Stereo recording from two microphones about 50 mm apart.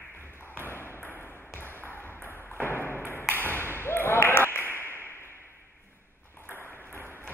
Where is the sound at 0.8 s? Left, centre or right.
Left.